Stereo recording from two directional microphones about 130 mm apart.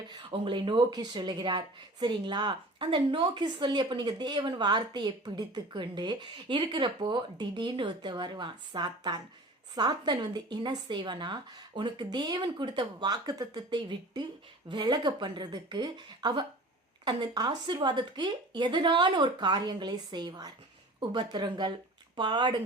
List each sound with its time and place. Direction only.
0.1 s speech: 35° right (ahead or behind)